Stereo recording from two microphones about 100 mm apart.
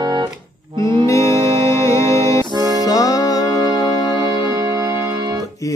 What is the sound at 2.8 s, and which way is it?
Music, 35° left (ahead or behind).